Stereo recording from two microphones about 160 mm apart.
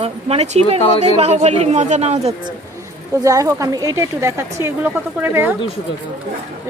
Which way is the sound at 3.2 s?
20° right (ahead or behind).